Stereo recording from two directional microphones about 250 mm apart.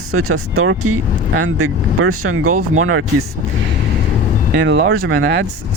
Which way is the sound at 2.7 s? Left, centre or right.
Right.